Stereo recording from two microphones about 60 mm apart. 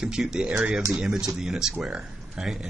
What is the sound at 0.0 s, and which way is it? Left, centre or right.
Speech, centre.